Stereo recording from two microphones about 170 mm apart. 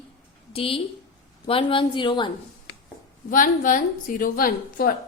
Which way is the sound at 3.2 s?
50° left (ahead or behind).